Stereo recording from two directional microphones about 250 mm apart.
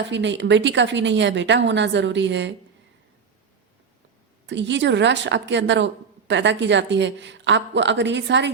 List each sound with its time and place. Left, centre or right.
0.1 s speech: right
4.4 s speech: right